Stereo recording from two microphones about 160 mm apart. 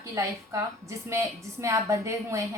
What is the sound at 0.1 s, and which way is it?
A woman's voice, 20° right (ahead or behind).